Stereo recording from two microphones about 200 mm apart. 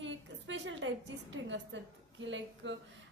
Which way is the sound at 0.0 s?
65° right (ahead or behind).